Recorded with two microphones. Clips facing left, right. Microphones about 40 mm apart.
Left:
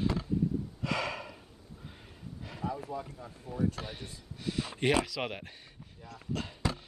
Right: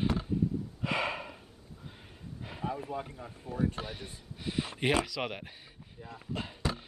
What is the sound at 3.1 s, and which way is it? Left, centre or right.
Speech, right.